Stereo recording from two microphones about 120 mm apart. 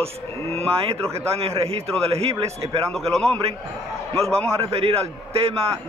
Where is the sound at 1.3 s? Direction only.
55° right (ahead or behind).